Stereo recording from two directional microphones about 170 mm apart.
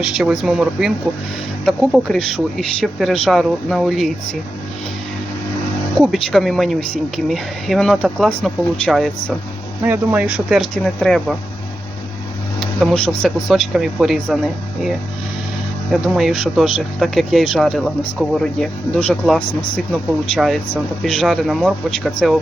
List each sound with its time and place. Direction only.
0.0 s speech: centre (ahead or behind)
6.0 s speech: centre (ahead or behind)
9.8 s speech: 10° right (ahead or behind)
12.5 s speech: 5° left (ahead or behind)
15.9 s speech: centre (ahead or behind)
19.4 s speech: 30° left (ahead or behind)
19.9 s speech: centre (ahead or behind)